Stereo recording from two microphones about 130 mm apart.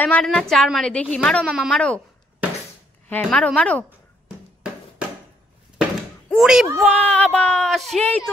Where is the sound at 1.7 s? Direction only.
5° left (ahead or behind).